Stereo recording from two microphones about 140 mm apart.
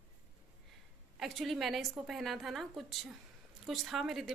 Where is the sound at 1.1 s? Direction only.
Centre (ahead or behind).